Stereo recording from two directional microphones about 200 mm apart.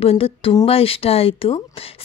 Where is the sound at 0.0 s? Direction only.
30° left (ahead or behind).